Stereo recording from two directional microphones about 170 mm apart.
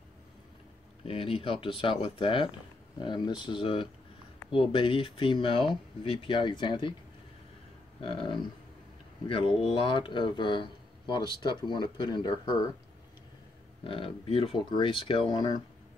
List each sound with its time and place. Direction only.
1.0 s speech: 35° left (ahead or behind)
8.0 s speech: 30° left (ahead or behind)
9.5 s speech: centre (ahead or behind)
9.8 s speech: 30° left (ahead or behind)
13.8 s speech: 30° left (ahead or behind)